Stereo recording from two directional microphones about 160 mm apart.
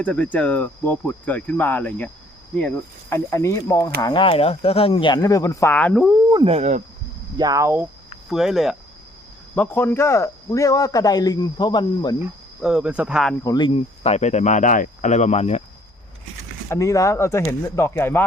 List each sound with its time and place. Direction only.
0.0 s speech: 10° left (ahead or behind)
4.0 s speech: 30° left (ahead or behind); by 6.1 s 5° left (ahead or behind)
6.3 s speech: 35° right (ahead or behind)
7.3 s speech: 25° right (ahead or behind)
8.3 s speech: centre (ahead or behind)
9.6 s speech: 15° left (ahead or behind)
12.6 s speech: 5° right (ahead or behind)
13.4 s speech: 25° left (ahead or behind); by 15.6 s 40° left (ahead or behind)
16.6 s speech: 20° left (ahead or behind)